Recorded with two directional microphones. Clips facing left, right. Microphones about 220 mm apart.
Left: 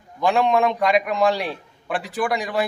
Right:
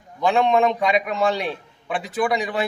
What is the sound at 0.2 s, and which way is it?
A man's voice, centre (ahead or behind).